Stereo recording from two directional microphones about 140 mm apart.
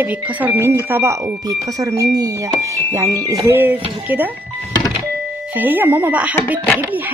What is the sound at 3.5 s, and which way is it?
Speech, 15° right (ahead or behind).